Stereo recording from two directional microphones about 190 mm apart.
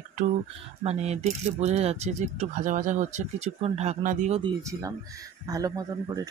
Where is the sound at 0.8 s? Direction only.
35° right (ahead or behind).